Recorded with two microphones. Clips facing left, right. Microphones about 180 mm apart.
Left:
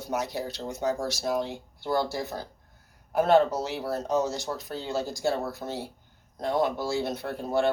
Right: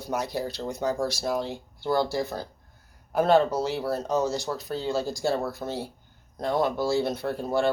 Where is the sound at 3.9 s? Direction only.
20° left (ahead or behind).